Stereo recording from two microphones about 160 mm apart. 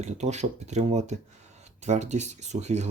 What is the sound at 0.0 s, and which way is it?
Speech, 45° right (ahead or behind).